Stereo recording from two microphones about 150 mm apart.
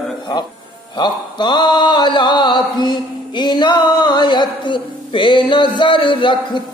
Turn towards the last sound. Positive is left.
turn(degrees=30)  # may be behind; listen again after turning